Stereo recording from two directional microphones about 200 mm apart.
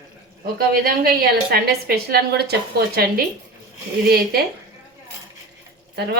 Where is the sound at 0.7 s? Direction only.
50° right (ahead or behind).